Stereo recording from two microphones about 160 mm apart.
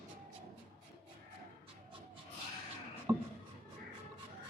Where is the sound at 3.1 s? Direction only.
25° right (ahead or behind).